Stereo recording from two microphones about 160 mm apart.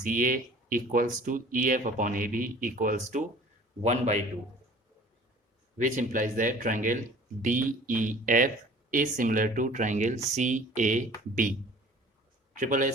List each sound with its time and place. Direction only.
0.0 s speech: 55° right (ahead or behind)
3.8 s speech: 45° right (ahead or behind)
5.7 s speech: 50° right (ahead or behind)